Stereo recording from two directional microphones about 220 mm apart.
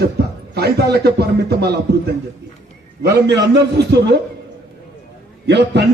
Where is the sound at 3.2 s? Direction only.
50° right (ahead or behind).